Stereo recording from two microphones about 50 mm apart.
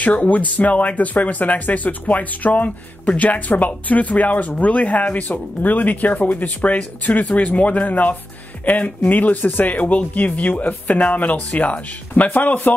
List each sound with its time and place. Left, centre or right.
0.0 s speech: left